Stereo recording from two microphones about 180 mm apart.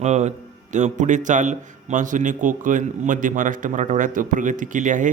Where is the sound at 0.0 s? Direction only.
40° right (ahead or behind).